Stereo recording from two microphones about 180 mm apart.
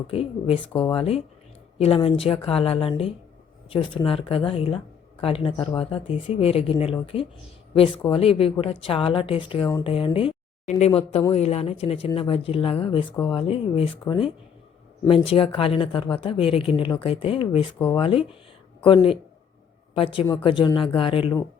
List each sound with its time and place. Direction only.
0.1 s speech: 35° left (ahead or behind)
15.3 s speech: 30° left (ahead or behind)
19.9 s a man's voice: 30° left (ahead or behind)